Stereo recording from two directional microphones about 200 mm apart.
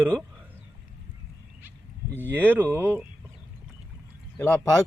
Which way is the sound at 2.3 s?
10° right (ahead or behind).